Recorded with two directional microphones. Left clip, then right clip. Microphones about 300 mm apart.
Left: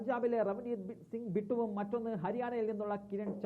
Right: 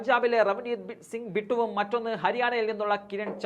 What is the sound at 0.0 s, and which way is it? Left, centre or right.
Speech, centre.